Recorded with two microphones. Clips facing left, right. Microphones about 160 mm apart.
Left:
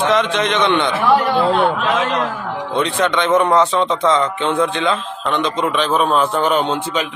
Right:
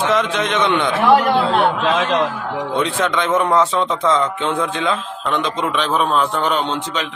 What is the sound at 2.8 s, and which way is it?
A man's voice, 5° right (ahead or behind).